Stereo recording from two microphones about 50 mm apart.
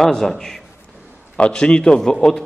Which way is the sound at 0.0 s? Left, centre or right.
Centre.